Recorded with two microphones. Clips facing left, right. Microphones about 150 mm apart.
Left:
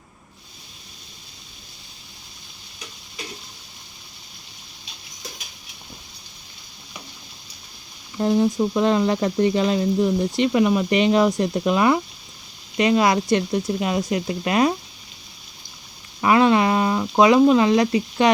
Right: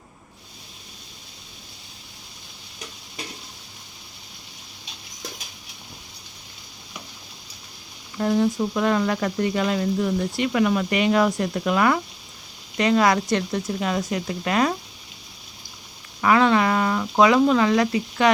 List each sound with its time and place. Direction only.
8.2 s speech: 20° left (ahead or behind)
16.2 s speech: 20° left (ahead or behind)